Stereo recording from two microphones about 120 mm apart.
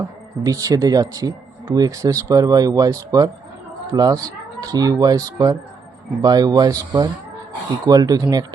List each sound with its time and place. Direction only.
0.4 s speech: 30° right (ahead or behind)